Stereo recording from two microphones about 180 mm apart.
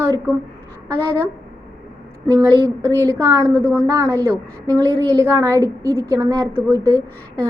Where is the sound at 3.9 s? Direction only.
20° right (ahead or behind).